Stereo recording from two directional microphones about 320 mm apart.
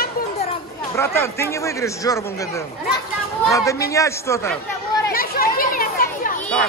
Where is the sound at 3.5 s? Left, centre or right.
Centre.